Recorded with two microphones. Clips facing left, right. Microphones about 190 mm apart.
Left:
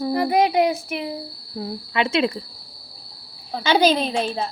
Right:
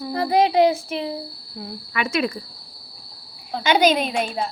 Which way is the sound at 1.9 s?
30° left (ahead or behind).